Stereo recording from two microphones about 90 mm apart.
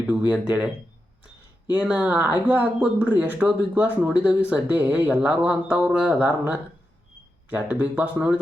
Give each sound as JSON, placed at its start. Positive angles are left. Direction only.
{"t": 0.0, "sound": "speech", "side_deg": -15}
{"t": 1.7, "sound": "speech", "side_deg": -15}